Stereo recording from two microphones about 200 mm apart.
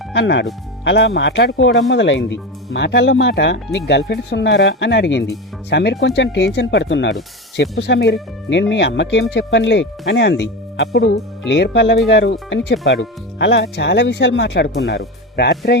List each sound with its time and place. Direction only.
0.1 s speech: 60° left (ahead or behind)